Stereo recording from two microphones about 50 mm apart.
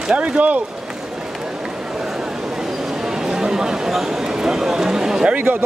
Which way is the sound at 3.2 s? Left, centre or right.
Centre.